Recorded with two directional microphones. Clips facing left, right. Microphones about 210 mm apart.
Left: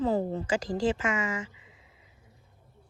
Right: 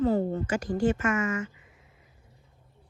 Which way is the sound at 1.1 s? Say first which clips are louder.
Right 3 dB; 15° left (ahead or behind).